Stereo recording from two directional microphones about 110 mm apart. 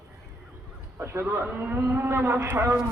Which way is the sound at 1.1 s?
20° right (ahead or behind).